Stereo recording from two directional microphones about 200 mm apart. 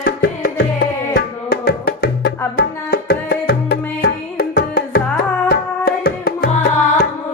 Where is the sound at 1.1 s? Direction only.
50° left (ahead or behind).